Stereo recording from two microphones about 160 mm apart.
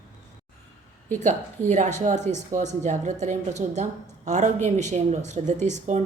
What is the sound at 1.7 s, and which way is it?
A woman's voice, 45° right (ahead or behind).